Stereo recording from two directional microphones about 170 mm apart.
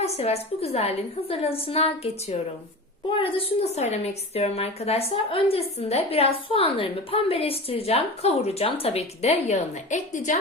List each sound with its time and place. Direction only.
0.0 s a woman's voice: 35° left (ahead or behind)